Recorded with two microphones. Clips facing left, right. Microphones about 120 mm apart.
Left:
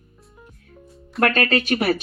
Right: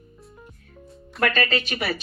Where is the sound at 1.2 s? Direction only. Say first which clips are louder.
Left 4 dB; 55° left (ahead or behind).